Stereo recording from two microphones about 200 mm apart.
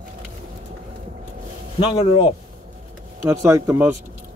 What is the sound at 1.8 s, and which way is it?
Speech, 30° left (ahead or behind).